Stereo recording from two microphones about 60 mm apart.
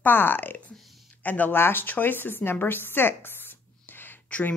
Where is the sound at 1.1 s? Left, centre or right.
Left.